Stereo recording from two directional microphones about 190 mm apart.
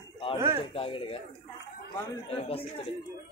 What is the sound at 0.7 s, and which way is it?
Speech, 30° left (ahead or behind).